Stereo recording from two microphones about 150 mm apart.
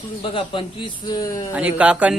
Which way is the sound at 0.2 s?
35° left (ahead or behind).